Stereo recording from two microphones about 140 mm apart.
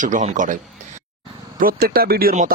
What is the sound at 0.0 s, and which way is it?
Speech, 65° right (ahead or behind).